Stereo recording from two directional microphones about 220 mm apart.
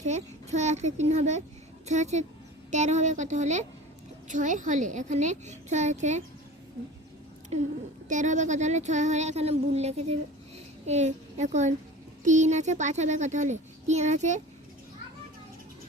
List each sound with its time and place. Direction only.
0.0 s a child's voice: 30° right (ahead or behind)
7.5 s a child's voice: 30° right (ahead or behind)